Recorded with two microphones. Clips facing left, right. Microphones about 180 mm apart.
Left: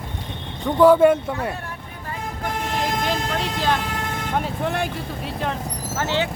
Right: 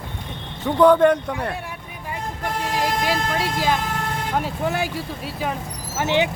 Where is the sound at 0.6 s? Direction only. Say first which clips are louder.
Left 1 dB; 5° left (ahead or behind).